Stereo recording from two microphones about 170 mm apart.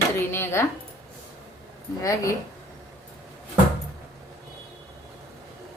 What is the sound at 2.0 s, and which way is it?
Speech, 20° left (ahead or behind).